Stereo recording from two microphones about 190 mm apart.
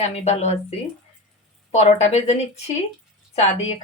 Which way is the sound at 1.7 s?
35° left (ahead or behind).